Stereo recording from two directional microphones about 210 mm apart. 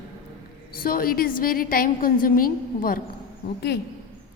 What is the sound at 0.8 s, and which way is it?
A woman's voice, 45° left (ahead or behind).